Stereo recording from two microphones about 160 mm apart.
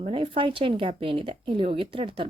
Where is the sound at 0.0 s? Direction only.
35° right (ahead or behind).